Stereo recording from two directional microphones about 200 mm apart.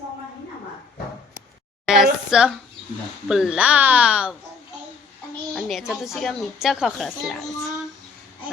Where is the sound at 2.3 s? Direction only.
5° right (ahead or behind).